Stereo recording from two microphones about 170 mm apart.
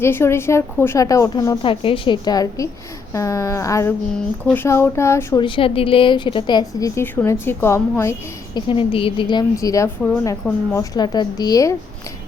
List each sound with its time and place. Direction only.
0.0 s a woman's voice: 15° left (ahead or behind)
5.4 s a woman's voice: 30° left (ahead or behind)
8.5 s a woman's voice: 30° left (ahead or behind); by 10.8 s 15° left (ahead or behind)
10.9 s a woman's voice: 25° left (ahead or behind)